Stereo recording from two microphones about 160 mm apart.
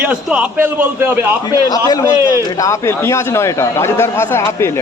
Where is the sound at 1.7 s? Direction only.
25° left (ahead or behind).